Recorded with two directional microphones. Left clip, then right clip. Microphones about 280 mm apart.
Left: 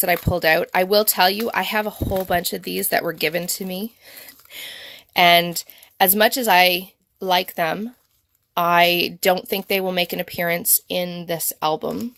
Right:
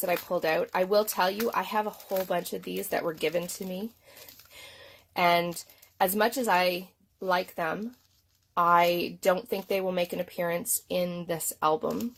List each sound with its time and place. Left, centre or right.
0.0 s speech: left
5.1 s speech: left